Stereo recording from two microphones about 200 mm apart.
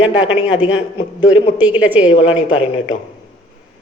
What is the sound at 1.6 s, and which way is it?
Speech, 5° right (ahead or behind).